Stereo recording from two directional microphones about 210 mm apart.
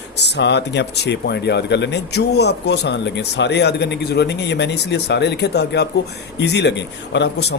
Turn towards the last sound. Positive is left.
turn(degrees=55)  # may be behind; listen again after turning